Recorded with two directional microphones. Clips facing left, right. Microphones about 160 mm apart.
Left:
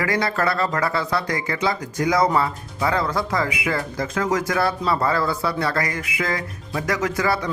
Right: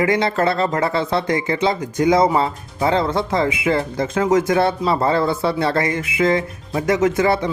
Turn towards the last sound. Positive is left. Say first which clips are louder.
# right 6 dB
turn(degrees=-25)  # may be behind; listen again after turning